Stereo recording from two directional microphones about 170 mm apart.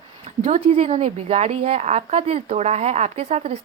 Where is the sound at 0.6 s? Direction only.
35° right (ahead or behind).